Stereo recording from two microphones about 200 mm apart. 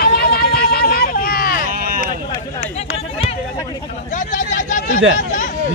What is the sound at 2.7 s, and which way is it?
Run, 30° left (ahead or behind).